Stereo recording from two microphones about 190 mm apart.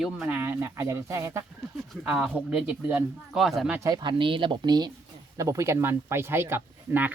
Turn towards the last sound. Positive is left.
turn(degrees=-10)  # may be behind; listen again after turning